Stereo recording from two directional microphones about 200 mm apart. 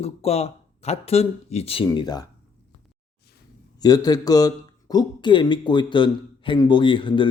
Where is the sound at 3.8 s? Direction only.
20° left (ahead or behind).